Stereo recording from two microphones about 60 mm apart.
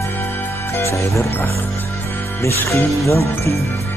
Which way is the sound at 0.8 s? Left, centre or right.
Left.